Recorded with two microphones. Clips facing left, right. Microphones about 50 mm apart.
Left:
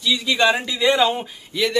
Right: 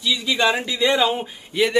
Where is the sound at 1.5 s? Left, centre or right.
Right.